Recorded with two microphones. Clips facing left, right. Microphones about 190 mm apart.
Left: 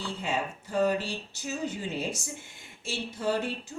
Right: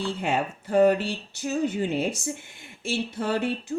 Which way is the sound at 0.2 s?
60° right (ahead or behind).